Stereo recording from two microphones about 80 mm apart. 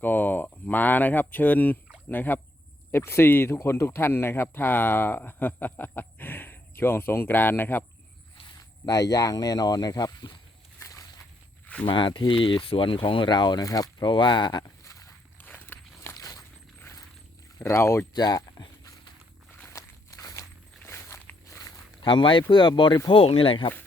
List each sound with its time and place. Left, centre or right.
0.0 s a sound: left
2.0 s speech: left
8.5 s speech: left
10.8 s a sound: left
11.6 s a sound: centre
11.9 s speech: left
14.0 s speech: left
15.4 s walk: left
16.8 s a sound: left
17.6 s speech: left
18.1 s speech: left
19.6 s walk: left
22.0 s speech: left
23.0 s speech: left